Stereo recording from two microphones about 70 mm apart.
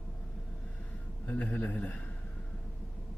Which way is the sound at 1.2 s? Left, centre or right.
Left.